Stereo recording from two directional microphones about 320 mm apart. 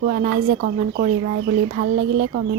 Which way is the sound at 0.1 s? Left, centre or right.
Right.